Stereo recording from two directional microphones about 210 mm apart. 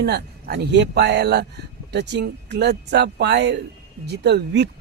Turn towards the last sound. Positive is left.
turn(degrees=-55)  # may be behind; listen again after turning